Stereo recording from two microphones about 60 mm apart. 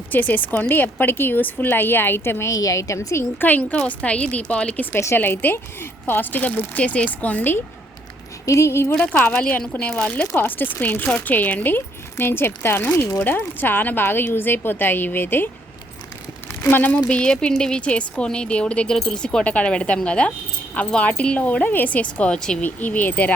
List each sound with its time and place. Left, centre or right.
0.1 s a woman's voice: left
2.5 s a woman's voice: left
3.4 s speech: left
4.9 s a woman's voice: left
8.4 s speech: left
8.9 s speech: centre
10.3 s a woman's voice: left
12.1 s a woman's voice: left
16.6 s speech: left